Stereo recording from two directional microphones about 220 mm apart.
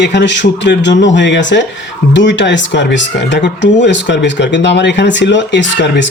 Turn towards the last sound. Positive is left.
turn(degrees=55)  # may be behind; listen again after turning